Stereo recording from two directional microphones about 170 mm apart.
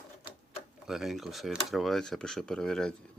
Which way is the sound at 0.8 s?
Centre (ahead or behind).